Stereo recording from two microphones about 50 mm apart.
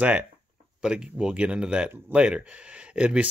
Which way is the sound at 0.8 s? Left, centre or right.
Centre.